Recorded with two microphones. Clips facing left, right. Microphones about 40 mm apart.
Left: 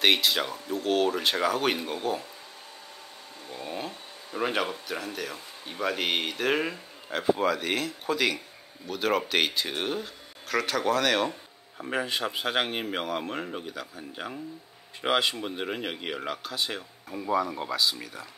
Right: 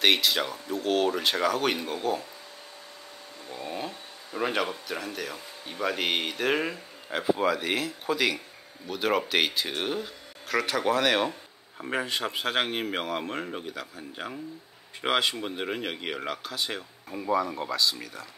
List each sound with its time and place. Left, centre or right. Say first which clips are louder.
0.0 s speech: even; centre
3.5 s speech: right 1 dB; centre